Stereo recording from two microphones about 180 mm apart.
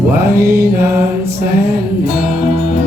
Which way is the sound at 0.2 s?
60° right (ahead or behind).